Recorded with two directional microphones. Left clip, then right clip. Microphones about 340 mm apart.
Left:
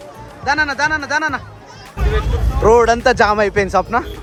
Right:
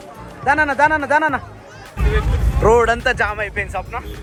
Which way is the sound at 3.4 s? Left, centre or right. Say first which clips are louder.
Left 7 dB; left.